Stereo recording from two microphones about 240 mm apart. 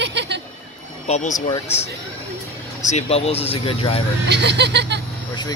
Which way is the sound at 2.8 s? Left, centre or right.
Left.